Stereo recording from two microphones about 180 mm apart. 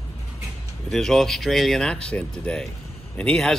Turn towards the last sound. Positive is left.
turn(degrees=5)  # may be behind; listen again after turning